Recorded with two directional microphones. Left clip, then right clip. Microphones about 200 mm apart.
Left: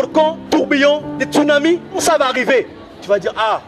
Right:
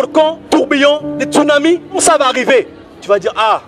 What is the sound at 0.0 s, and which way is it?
A man's voice, 35° right (ahead or behind).